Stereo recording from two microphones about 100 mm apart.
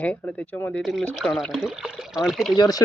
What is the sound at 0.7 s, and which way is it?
Speech, centre (ahead or behind).